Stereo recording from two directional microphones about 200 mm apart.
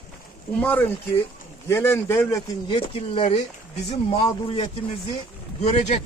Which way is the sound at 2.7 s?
25° left (ahead or behind).